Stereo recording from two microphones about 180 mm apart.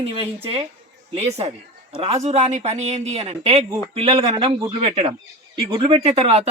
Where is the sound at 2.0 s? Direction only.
35° right (ahead or behind).